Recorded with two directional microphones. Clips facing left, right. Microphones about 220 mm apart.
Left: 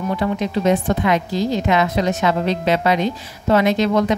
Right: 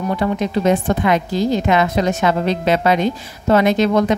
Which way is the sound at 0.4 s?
50° right (ahead or behind).